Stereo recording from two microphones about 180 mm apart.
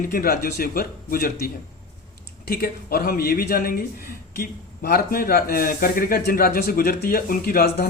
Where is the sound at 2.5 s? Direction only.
55° left (ahead or behind).